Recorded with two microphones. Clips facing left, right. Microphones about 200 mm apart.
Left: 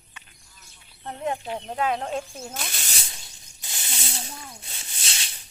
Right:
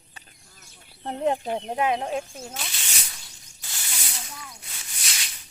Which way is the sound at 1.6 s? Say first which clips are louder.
Right 1 dB; 20° right (ahead or behind).